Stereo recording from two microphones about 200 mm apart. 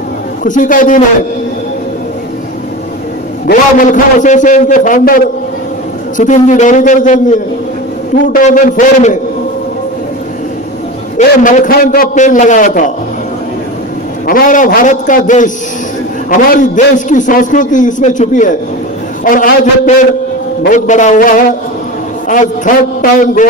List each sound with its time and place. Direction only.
0.4 s a man's voice: 40° left (ahead or behind)
3.4 s a man's voice: 40° left (ahead or behind)
11.1 s a man's voice: 40° left (ahead or behind)
14.2 s a man's voice: 45° left (ahead or behind)